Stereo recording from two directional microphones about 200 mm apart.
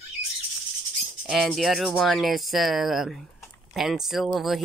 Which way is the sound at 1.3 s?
Centre (ahead or behind).